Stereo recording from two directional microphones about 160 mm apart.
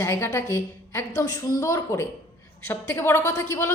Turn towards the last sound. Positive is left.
turn(degrees=15)  # may be behind; listen again after turning